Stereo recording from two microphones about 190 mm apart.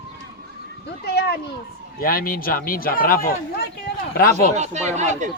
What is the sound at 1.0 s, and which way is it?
A child's voice, 60° left (ahead or behind).